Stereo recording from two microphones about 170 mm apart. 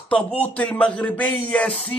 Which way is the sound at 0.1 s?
5° left (ahead or behind).